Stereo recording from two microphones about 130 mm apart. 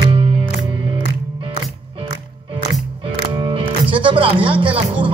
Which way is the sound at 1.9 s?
40° right (ahead or behind).